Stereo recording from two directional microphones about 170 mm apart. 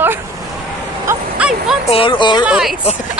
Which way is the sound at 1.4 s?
Centre (ahead or behind).